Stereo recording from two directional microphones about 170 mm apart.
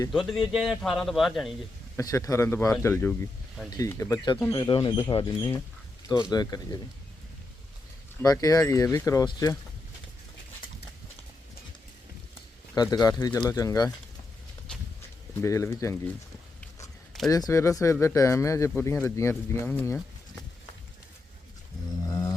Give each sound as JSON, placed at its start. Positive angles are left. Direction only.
{"t": 0.1, "sound": "a man's voice", "side_deg": 0}
{"t": 2.0, "sound": "speech", "side_deg": 20}
{"t": 4.5, "sound": "speech", "side_deg": 30}
{"t": 8.2, "sound": "speech", "side_deg": 20}
{"t": 12.7, "sound": "speech", "side_deg": 25}
{"t": 15.4, "sound": "speech", "side_deg": 15}
{"t": 17.2, "sound": "speech", "side_deg": 20}
{"t": 22.0, "sound": "a sound", "side_deg": 20}